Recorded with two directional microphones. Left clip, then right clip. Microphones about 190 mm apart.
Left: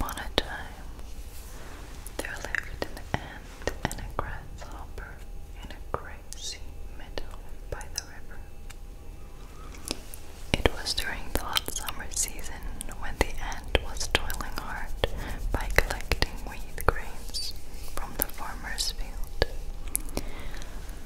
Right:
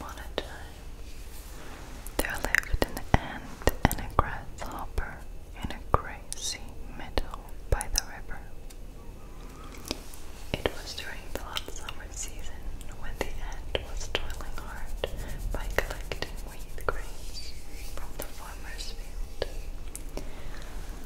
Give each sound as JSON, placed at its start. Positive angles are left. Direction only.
{"t": 0.0, "sound": "whispering", "side_deg": 45}
{"t": 2.1, "sound": "whispering", "side_deg": -35}
{"t": 9.9, "sound": "a sound", "side_deg": -5}
{"t": 10.5, "sound": "whispering", "side_deg": 45}
{"t": 13.0, "sound": "whispering", "side_deg": 45}